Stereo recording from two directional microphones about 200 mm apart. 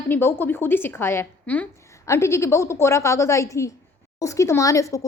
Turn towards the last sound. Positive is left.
turn(degrees=15)  # may be behind; listen again after turning